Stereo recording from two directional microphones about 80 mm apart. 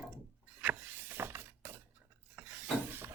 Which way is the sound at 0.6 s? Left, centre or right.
Right.